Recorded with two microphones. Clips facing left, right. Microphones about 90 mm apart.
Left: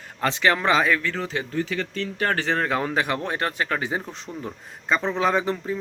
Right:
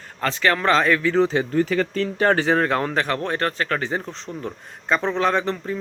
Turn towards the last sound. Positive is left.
turn(degrees=5)  # may be behind; listen again after turning